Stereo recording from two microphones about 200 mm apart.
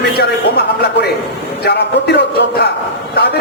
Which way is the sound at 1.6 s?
55° left (ahead or behind).